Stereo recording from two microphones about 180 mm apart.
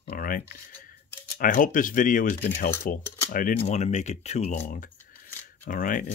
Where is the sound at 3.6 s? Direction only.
40° left (ahead or behind).